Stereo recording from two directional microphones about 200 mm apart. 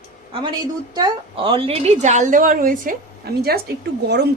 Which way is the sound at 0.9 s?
25° right (ahead or behind).